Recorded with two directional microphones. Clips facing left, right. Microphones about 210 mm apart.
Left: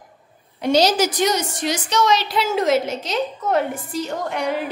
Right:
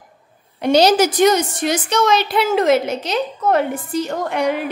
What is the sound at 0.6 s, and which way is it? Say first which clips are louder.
A woman's voice: right 4 dB; 60° right (ahead or behind).